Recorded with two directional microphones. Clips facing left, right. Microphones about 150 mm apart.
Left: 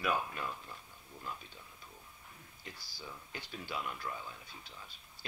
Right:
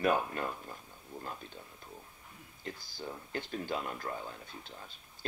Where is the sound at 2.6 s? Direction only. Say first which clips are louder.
Right 8 dB; 50° right (ahead or behind).